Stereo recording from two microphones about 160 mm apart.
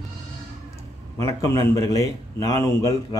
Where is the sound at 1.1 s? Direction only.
20° left (ahead or behind).